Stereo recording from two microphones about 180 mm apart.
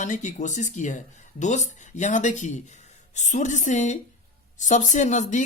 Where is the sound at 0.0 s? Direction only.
45° left (ahead or behind).